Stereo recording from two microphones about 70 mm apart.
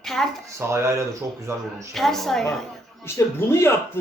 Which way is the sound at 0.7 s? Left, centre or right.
Right.